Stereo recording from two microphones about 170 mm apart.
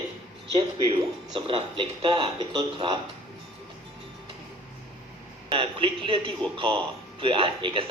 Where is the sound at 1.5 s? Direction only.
30° right (ahead or behind).